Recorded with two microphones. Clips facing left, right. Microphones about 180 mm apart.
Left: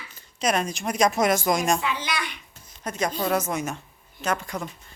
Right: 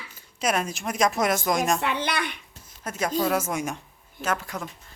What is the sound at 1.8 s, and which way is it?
Speech, 60° right (ahead or behind).